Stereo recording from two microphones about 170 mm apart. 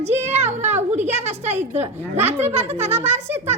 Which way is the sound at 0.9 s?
40° right (ahead or behind).